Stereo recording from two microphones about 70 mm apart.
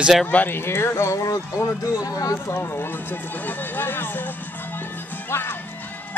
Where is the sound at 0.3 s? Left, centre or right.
Left.